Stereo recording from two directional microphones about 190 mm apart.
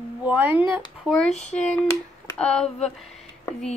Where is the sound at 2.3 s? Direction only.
5° left (ahead or behind).